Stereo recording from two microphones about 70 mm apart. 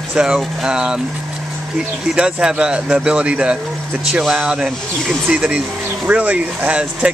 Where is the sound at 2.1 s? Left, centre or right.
Centre.